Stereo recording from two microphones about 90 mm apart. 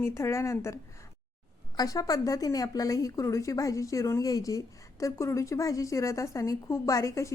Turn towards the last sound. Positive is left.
turn(degrees=35)  # may be behind; listen again after turning